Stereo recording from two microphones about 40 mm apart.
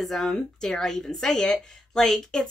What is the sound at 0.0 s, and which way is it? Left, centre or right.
Speech, centre.